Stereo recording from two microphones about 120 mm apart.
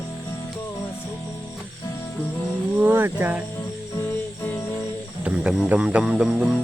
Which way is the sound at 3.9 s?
20° left (ahead or behind).